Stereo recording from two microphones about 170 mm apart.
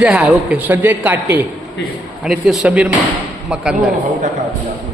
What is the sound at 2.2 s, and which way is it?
A man's voice, centre (ahead or behind).